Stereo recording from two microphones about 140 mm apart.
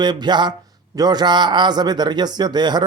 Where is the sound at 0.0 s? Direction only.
30° right (ahead or behind).